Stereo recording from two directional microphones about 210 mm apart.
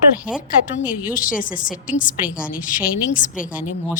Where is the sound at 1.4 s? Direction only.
40° left (ahead or behind).